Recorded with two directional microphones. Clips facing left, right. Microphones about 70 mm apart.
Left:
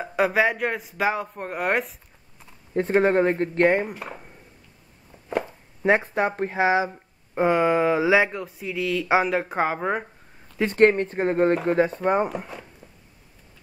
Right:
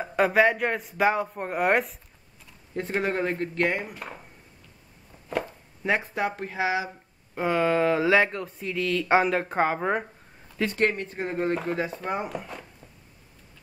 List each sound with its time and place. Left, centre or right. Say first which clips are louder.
0.0 s speech: even; centre
2.7 s speech: left 8 dB; left
3.9 s speech: left 3 dB; centre
5.9 s speech: left 5 dB; left
7.3 s speech: left 3 dB; left; by 10.0 s centre
10.7 s speech: left 10 dB; left